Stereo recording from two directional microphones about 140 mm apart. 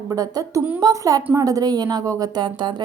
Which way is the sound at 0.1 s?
25° right (ahead or behind).